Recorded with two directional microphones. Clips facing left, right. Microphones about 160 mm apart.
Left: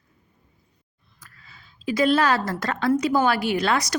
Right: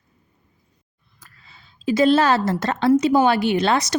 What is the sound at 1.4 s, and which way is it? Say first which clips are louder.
A woman's voice: right 5 dB; 25° right (ahead or behind).